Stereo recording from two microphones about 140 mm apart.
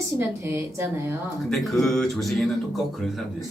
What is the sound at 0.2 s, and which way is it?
Speech, 15° right (ahead or behind).